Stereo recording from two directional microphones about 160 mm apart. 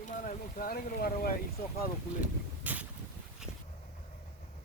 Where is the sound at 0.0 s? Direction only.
55° left (ahead or behind).